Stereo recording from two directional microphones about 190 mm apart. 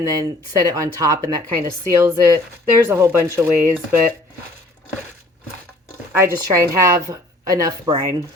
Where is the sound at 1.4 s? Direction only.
15° left (ahead or behind).